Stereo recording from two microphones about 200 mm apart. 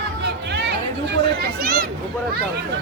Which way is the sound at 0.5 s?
55° right (ahead or behind).